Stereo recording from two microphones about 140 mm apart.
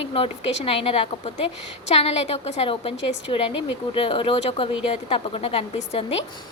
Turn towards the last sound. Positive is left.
turn(degrees=45)  # may be behind; listen again after turning